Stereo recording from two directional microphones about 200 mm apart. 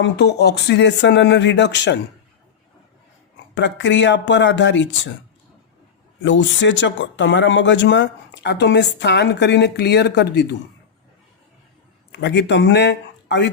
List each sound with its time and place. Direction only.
0.0 s speech: 55° left (ahead or behind)
3.5 s speech: 65° left (ahead or behind)
6.2 s speech: 65° left (ahead or behind)
12.1 s speech: 60° left (ahead or behind)